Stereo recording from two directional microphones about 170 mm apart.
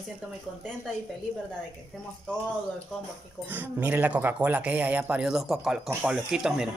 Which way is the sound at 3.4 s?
10° right (ahead or behind).